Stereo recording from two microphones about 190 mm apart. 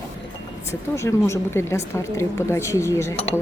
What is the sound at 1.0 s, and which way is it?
Speech, 15° left (ahead or behind).